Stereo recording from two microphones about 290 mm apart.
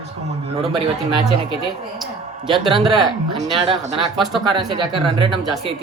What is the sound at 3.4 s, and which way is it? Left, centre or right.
Speech, right.